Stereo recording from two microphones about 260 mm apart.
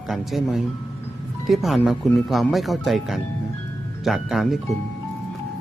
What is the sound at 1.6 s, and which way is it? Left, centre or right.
Speech, centre.